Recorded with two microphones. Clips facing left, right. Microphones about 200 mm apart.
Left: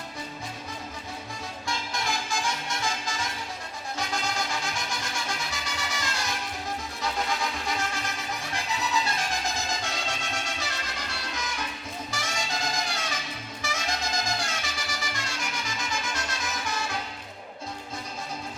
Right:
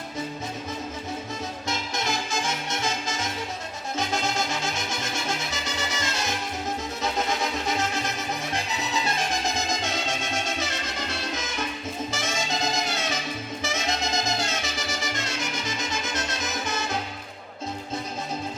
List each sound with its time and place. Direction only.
1.6 s music: 20° right (ahead or behind)